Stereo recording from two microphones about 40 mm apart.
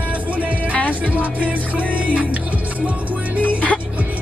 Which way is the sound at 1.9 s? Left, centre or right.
Right.